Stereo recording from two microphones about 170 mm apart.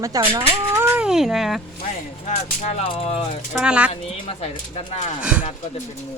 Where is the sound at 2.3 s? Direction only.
40° left (ahead or behind).